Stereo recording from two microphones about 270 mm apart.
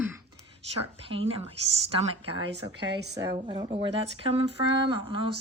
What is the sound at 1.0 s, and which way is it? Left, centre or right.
Speech, right.